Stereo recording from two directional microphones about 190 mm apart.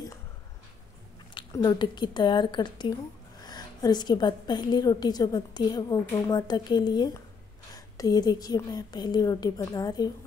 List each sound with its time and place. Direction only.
1.3 s a woman's voice: 20° left (ahead or behind)